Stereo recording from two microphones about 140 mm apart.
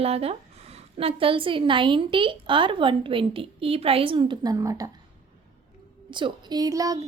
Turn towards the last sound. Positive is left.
turn(degrees=-25)  # may be behind; listen again after turning